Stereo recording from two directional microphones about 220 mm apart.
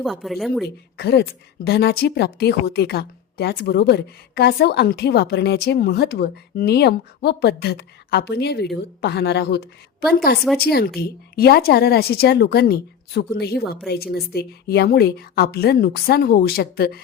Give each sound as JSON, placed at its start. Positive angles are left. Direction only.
{"t": 0.0, "sound": "a woman's voice", "side_deg": 0}
{"t": 0.6, "sound": "a woman's voice", "side_deg": 45}